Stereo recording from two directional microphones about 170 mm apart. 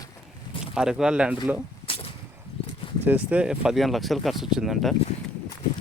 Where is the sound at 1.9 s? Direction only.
35° left (ahead or behind).